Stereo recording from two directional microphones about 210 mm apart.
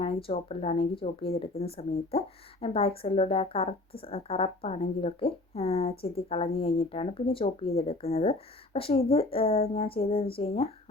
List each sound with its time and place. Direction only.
0.0 s speech: 25° left (ahead or behind)